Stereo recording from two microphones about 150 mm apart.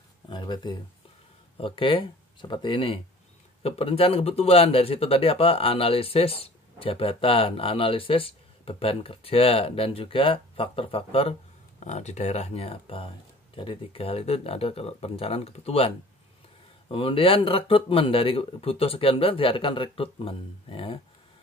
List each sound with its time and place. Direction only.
0.3 s a sound: 30° left (ahead or behind)
1.6 s speech: 35° left (ahead or behind)
16.9 s speech: 35° left (ahead or behind)